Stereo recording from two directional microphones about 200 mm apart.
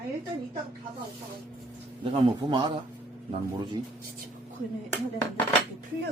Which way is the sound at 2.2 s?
25° right (ahead or behind).